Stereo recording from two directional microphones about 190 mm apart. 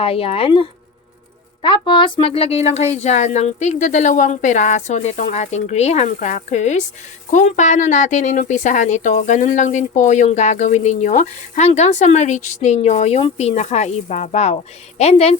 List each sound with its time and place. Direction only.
0.0 s speech: 30° left (ahead or behind)